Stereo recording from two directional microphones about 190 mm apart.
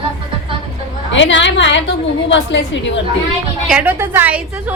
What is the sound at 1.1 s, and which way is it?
A woman's voice, 75° left (ahead or behind).